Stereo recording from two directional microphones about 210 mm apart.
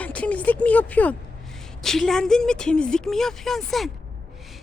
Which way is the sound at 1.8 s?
Centre (ahead or behind).